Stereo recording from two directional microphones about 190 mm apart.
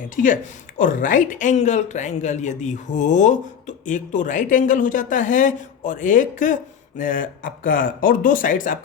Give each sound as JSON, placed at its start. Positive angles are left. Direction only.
{"t": 0.8, "sound": "speech", "side_deg": 45}